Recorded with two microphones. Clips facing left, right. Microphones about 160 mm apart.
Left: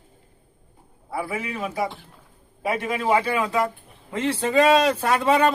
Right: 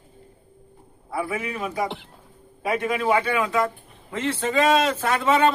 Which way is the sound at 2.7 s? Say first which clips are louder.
Even; 30° left (ahead or behind).